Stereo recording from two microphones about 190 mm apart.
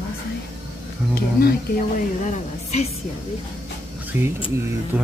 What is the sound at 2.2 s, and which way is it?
Speech, 35° left (ahead or behind).